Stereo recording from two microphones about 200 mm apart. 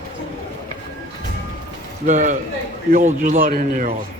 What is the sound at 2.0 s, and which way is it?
A man's voice, 35° right (ahead or behind).